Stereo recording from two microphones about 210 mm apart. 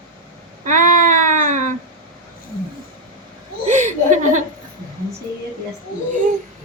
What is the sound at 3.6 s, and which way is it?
Speech, 35° right (ahead or behind).